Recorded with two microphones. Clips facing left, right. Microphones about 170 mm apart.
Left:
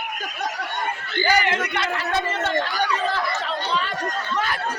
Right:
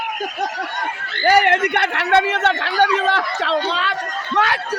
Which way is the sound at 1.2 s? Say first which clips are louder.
Right 7 dB; 60° right (ahead or behind).